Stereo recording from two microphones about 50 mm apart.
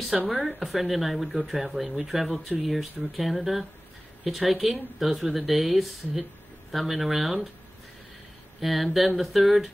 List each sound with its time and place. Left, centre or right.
0.1 s speech: centre
8.5 s speech: centre